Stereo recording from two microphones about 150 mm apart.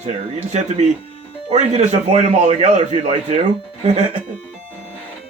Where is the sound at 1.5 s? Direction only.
50° right (ahead or behind).